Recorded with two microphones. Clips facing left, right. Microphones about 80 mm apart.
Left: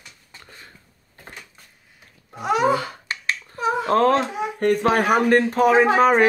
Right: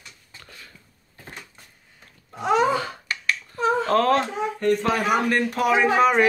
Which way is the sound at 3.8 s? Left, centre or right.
Left.